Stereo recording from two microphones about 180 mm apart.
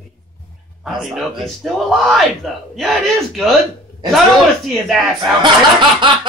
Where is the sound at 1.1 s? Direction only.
Centre (ahead or behind).